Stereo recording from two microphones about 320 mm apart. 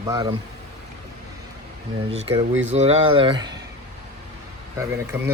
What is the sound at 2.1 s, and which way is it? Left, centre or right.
Speech, centre.